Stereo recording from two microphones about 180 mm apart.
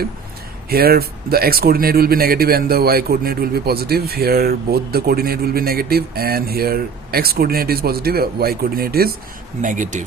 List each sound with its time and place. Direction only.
0.7 s speech: 60° right (ahead or behind)
9.6 s speech: 45° right (ahead or behind)